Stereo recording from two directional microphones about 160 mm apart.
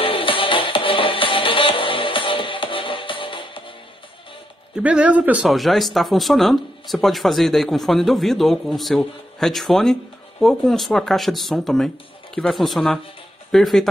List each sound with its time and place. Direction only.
0.0 s music: 35° left (ahead or behind)
4.7 s speech: 5° right (ahead or behind)